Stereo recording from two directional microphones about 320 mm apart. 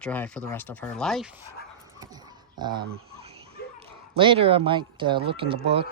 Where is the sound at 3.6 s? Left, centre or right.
Left.